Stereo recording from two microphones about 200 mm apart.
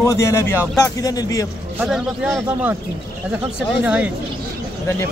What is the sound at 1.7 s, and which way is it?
Speech, 5° right (ahead or behind).